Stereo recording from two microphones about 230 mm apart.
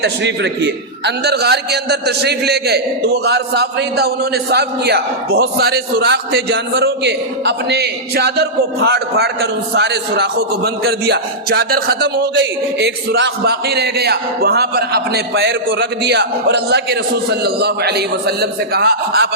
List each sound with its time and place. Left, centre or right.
0.0 s a man's voice: right